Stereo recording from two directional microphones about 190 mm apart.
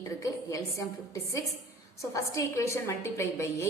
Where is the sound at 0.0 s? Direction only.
15° left (ahead or behind).